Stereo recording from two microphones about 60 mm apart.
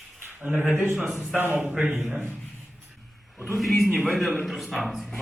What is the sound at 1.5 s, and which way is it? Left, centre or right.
Speech, centre.